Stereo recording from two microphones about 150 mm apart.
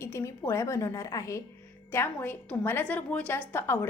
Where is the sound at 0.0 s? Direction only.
20° left (ahead or behind).